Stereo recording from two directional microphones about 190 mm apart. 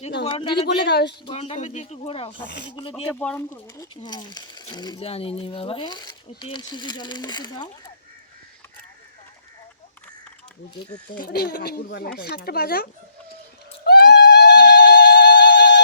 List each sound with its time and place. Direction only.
0.3 s speech: 25° left (ahead or behind)
0.9 s speech: 60° left (ahead or behind)
1.2 s speech: 30° left (ahead or behind)
3.2 s speech: 10° left (ahead or behind)
11.1 s speech: 50° left (ahead or behind)
13.8 s goat: 55° left (ahead or behind)